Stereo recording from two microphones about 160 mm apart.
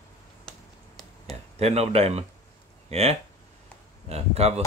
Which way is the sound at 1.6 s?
40° right (ahead or behind).